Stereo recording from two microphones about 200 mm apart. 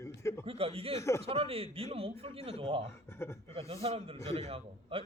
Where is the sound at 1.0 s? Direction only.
15° left (ahead or behind).